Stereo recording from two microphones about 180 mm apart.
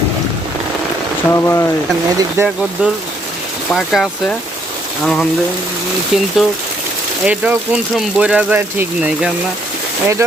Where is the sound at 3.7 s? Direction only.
Centre (ahead or behind).